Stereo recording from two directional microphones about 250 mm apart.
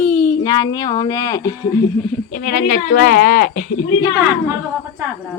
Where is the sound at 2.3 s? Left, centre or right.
Left.